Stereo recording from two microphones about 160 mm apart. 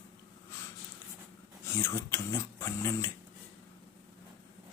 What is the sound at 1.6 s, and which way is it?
Speech, 20° left (ahead or behind).